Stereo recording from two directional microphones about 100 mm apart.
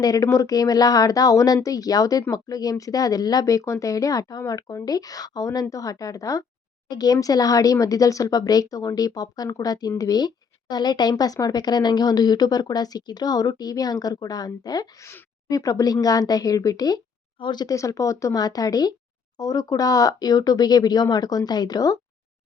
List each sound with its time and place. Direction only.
0.0 s a woman's voice: 35° left (ahead or behind)
17.7 s a woman's voice: 35° left (ahead or behind)